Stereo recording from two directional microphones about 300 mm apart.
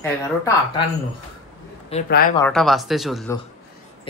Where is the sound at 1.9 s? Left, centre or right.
Left.